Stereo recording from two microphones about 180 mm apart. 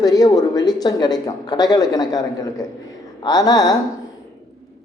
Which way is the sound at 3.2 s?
20° left (ahead or behind).